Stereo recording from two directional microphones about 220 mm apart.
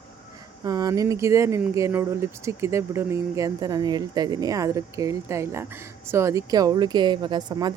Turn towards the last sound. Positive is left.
turn(degrees=-20)  # may be behind; listen again after turning